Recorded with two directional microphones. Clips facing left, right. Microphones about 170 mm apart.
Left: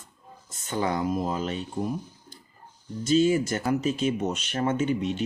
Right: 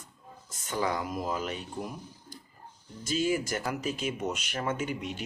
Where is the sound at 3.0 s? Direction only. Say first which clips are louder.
Left 7 dB; 25° left (ahead or behind).